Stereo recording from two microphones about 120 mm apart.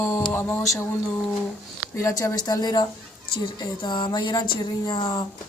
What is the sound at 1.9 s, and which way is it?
Speech, 30° left (ahead or behind).